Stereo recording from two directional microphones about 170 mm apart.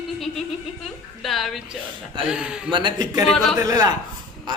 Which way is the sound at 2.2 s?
5° right (ahead or behind).